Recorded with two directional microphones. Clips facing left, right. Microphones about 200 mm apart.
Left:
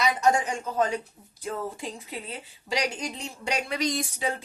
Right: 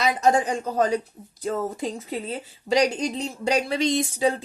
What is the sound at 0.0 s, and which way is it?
A woman's voice, 35° right (ahead or behind).